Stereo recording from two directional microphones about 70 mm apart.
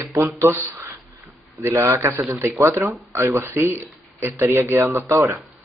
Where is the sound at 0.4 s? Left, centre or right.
Right.